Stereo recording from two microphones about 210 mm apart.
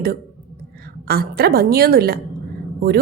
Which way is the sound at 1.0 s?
45° right (ahead or behind).